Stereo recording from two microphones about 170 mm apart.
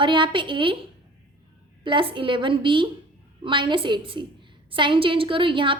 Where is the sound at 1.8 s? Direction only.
30° right (ahead or behind).